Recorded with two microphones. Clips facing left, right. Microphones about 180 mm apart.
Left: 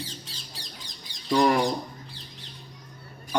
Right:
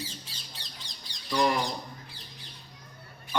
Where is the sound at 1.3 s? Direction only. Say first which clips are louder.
Left 5 dB; 50° left (ahead or behind).